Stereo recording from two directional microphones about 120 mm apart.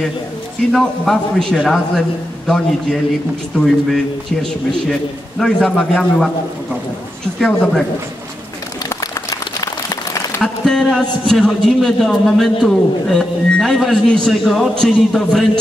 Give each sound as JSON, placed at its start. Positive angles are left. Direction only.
{"t": 0.7, "sound": "a man's voice", "side_deg": 0}
{"t": 7.3, "sound": "a man's voice", "side_deg": 5}
{"t": 8.8, "sound": "a sound", "side_deg": 30}
{"t": 10.4, "sound": "a man's voice", "side_deg": 5}